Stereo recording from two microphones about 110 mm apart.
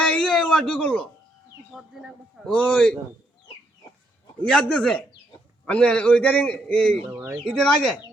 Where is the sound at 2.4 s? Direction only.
10° left (ahead or behind).